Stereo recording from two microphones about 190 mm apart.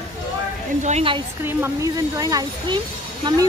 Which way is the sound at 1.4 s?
15° right (ahead or behind).